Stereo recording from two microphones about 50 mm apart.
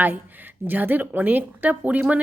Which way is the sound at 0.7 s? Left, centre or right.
Right.